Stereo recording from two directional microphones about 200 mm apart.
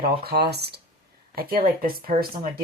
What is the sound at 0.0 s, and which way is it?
Speech, 50° right (ahead or behind).